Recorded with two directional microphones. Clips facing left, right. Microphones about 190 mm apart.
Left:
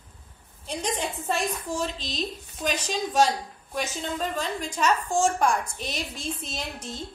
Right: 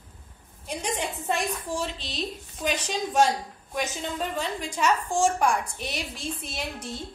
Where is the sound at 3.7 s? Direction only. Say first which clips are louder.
Even; 15° right (ahead or behind).